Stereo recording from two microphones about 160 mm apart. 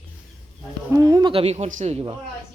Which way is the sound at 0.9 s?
25° right (ahead or behind).